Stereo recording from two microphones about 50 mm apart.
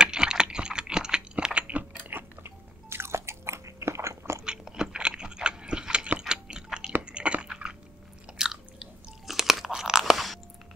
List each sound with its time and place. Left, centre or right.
0.0 s typing: centre
2.0 s biting: right
4.5 s a sound: centre
7.1 s drip: right
8.3 s chewing: centre
9.3 s crunch: centre
10.1 s chewing: centre